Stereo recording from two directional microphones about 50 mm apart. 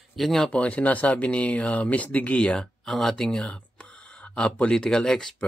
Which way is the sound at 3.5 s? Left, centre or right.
Left.